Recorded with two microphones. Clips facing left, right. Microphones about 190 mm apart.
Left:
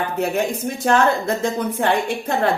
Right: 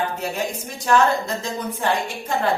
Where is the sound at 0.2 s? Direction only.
55° left (ahead or behind).